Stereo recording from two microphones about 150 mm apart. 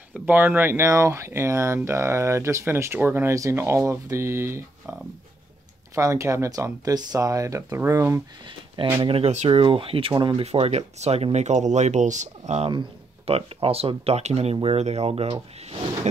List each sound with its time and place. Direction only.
0.1 s speech: 10° right (ahead or behind)
5.9 s speech: 20° right (ahead or behind)
9.0 s speech: 40° right (ahead or behind)